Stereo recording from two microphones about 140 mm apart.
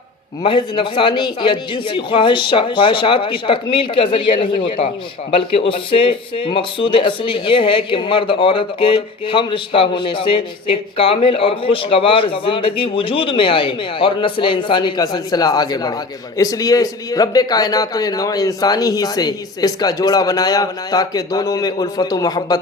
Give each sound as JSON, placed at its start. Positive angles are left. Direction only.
{"t": 0.4, "sound": "a man's voice", "side_deg": 35}